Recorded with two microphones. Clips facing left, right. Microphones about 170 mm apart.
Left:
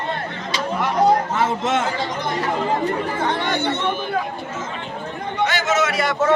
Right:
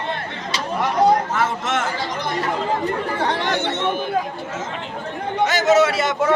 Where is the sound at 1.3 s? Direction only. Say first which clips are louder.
Left 2 dB; 20° left (ahead or behind).